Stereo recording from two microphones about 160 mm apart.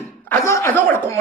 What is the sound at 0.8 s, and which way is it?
Speech, 10° left (ahead or behind).